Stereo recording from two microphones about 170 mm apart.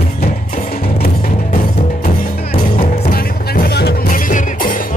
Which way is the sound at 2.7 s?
60° left (ahead or behind).